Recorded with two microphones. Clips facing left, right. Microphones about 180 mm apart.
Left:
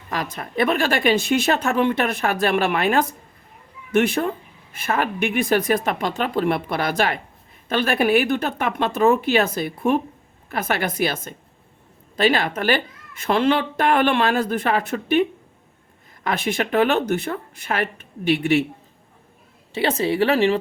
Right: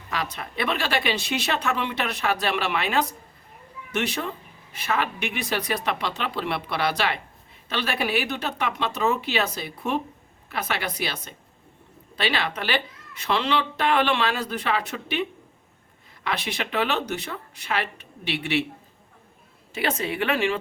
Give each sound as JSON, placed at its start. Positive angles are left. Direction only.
{"t": 0.1, "sound": "speech", "side_deg": 45}
{"t": 19.7, "sound": "speech", "side_deg": 30}